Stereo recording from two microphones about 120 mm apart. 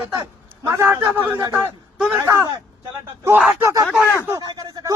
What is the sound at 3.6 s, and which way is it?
Speech, 25° right (ahead or behind).